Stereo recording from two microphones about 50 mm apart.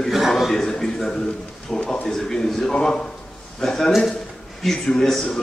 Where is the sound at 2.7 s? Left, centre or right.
Centre.